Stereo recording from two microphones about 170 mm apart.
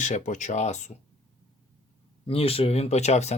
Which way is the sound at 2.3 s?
35° left (ahead or behind).